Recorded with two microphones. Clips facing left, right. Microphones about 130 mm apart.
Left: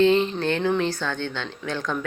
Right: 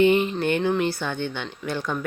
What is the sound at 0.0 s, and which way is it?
Speech, 10° right (ahead or behind).